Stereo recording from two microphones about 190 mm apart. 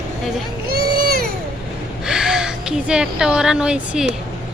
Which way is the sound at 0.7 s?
50° right (ahead or behind).